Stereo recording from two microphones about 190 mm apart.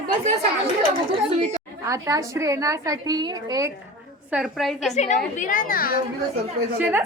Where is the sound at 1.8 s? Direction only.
15° right (ahead or behind).